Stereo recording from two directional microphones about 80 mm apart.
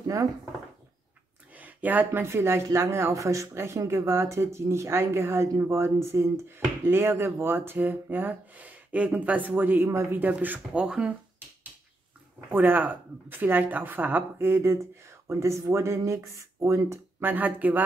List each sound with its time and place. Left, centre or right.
0.0 s a sound: right
1.6 s speech: right
2.2 s speech: right
10.8 s speech: centre
12.4 s speech: right
17.2 s speech: right